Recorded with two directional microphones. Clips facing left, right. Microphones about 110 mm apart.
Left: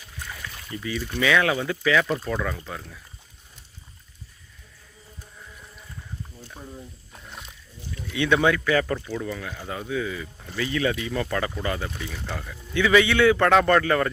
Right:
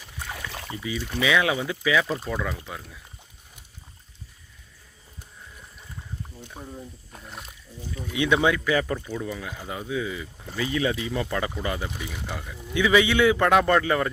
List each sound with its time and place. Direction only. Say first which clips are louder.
0.3 s rowboat: right 5 dB; 75° right (ahead or behind)
0.7 s speech: left 2 dB; 15° right (ahead or behind)
6.4 s speech: right 3 dB; 15° right (ahead or behind)
7.1 s speech: right 1 dB; centre (ahead or behind)
7.8 s speech: right 2 dB; 40° right (ahead or behind)
8.1 s speech: left 1 dB; 15° right (ahead or behind)